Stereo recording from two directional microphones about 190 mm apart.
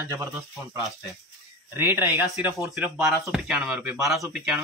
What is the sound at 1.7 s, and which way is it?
Speech, 10° right (ahead or behind).